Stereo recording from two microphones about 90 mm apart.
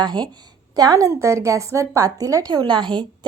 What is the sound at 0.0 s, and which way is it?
Speech, 50° right (ahead or behind).